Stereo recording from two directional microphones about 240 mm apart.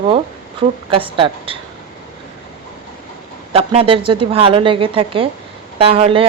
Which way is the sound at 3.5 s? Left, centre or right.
Right.